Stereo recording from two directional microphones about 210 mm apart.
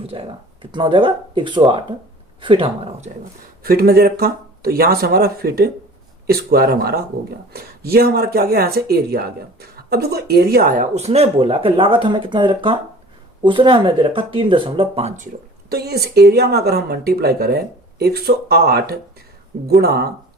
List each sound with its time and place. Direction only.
0.1 s speech: 25° right (ahead or behind)
3.6 s speech: 45° right (ahead or behind)
15.7 s speech: 50° right (ahead or behind)